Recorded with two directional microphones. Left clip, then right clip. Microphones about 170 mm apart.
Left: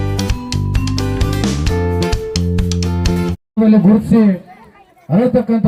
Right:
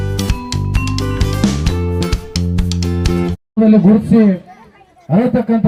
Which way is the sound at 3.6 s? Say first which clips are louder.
Right 1 dB; 35° right (ahead or behind).